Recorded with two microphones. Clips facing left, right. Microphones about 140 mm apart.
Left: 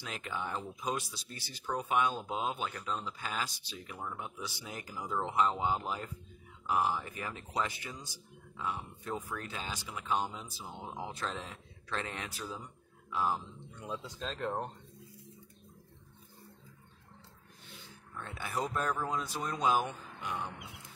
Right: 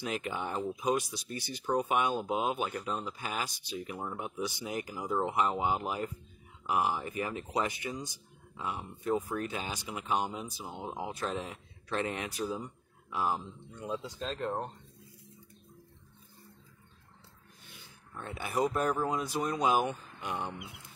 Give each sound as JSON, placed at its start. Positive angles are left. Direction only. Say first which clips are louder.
{"t": 0.0, "sound": "speech", "louder": "right 4 dB", "side_deg": -15}
{"t": 13.7, "sound": "speech", "louder": "right 4 dB", "side_deg": 0}
{"t": 17.6, "sound": "speech", "louder": "left 3 dB", "side_deg": -15}